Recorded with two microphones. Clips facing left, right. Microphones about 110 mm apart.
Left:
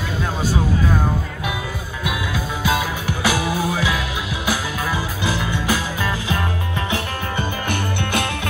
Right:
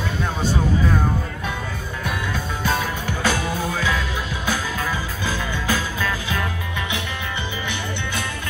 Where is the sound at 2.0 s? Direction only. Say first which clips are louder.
Left 2 dB; 10° left (ahead or behind).